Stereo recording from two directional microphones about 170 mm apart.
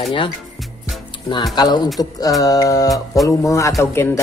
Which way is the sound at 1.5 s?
25° left (ahead or behind).